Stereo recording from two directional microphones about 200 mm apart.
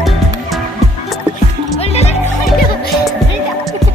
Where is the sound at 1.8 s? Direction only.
30° left (ahead or behind).